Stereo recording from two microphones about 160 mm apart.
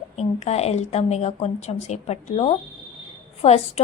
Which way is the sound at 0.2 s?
40° left (ahead or behind).